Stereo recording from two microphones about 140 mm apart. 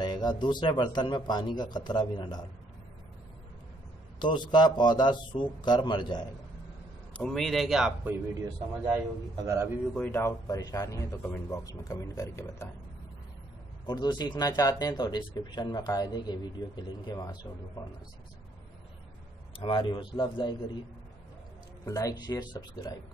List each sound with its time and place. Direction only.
0.0 s speech: 30° left (ahead or behind)
4.2 s speech: 30° left (ahead or behind)
7.2 s a man's voice: 5° left (ahead or behind)
8.0 s a man's voice: 15° right (ahead or behind)
9.9 s speech: 15° left (ahead or behind)
13.8 s speech: 30° left (ahead or behind)
19.6 s speech: 35° left (ahead or behind)
21.8 s speech: 25° left (ahead or behind)